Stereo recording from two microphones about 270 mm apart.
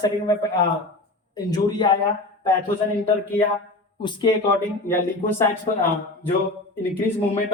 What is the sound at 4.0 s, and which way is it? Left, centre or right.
A man's voice, centre.